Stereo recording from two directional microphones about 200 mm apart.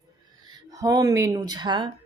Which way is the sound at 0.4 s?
20° right (ahead or behind).